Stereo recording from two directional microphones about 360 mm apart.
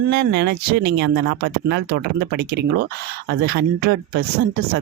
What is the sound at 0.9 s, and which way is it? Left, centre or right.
Speech, right.